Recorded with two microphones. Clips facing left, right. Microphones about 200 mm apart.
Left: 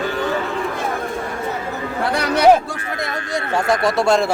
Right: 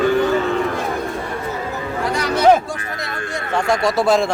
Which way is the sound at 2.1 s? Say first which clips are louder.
Left 1 dB; 65° left (ahead or behind).